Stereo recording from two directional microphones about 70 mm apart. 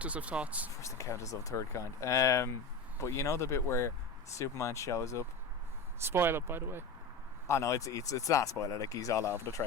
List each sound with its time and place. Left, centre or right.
0.0 s speech: centre
0.8 s speech: left
6.0 s speech: right
7.4 s speech: left